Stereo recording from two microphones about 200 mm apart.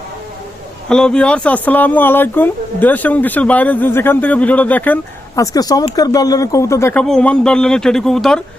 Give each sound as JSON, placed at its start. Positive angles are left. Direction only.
{"t": 0.9, "sound": "a man's voice", "side_deg": 5}